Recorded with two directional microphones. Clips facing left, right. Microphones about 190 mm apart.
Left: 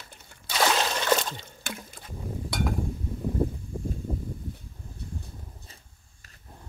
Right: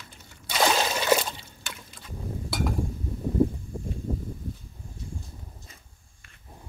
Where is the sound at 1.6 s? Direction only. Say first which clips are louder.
Left 5 dB; 50° left (ahead or behind).